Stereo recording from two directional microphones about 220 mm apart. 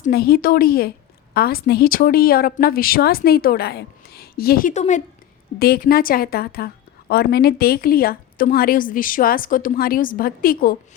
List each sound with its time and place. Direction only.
0.0 s a woman's voice: 45° left (ahead or behind)
5.5 s a woman's voice: 45° left (ahead or behind)